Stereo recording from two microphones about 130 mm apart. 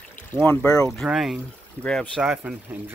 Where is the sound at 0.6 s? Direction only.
25° left (ahead or behind).